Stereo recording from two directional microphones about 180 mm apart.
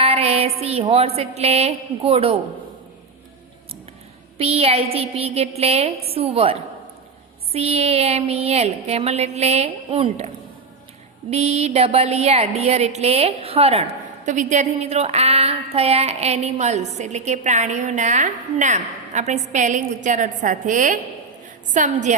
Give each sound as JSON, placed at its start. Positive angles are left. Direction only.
{"t": 0.0, "sound": "a woman's voice", "side_deg": -35}
{"t": 4.4, "sound": "a woman's voice", "side_deg": -35}
{"t": 11.3, "sound": "a woman's voice", "side_deg": -35}